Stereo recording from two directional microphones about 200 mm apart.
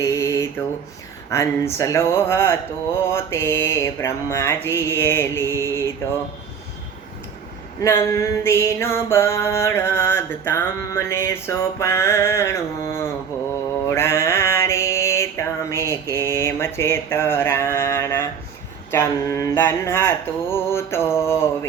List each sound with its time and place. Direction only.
0.0 s mantra: 15° left (ahead or behind)
7.8 s mantra: 15° left (ahead or behind)